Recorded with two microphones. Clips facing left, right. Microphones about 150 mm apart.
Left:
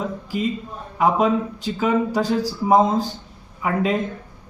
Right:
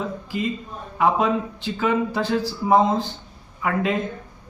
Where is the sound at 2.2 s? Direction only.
40° left (ahead or behind).